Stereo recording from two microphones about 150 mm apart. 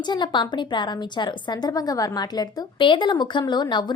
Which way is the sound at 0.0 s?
30° left (ahead or behind).